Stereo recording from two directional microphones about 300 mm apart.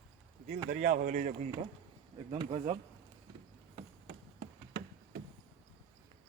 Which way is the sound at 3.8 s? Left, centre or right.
Right.